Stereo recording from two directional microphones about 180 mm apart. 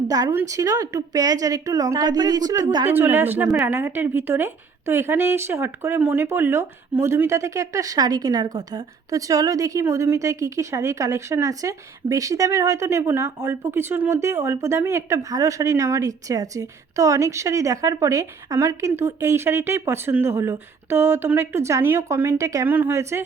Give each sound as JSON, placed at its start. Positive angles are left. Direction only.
{"t": 0.1, "sound": "speech", "side_deg": -15}